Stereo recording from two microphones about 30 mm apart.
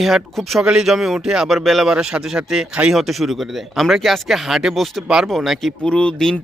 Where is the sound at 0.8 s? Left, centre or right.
Centre.